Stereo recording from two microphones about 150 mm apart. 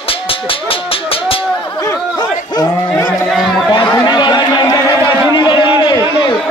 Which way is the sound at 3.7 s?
30° left (ahead or behind).